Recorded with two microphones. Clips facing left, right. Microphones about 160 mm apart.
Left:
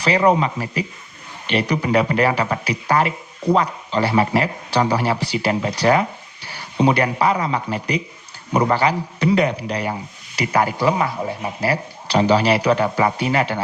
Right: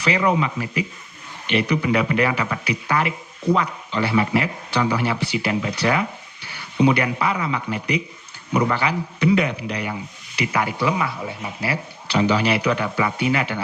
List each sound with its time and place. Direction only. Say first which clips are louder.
0.0 s speech: left 4 dB; 35° left (ahead or behind)